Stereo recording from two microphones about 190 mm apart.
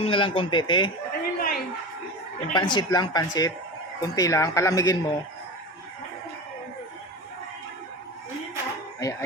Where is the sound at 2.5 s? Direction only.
25° left (ahead or behind).